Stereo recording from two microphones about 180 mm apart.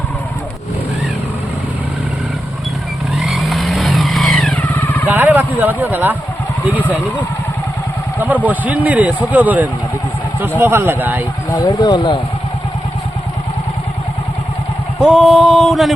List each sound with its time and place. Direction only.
3.2 s vehicle: centre (ahead or behind)
5.0 s a sound: 10° right (ahead or behind)
8.2 s speech: 10° right (ahead or behind)
11.5 s speech: 20° left (ahead or behind)
14.9 s male singing: centre (ahead or behind)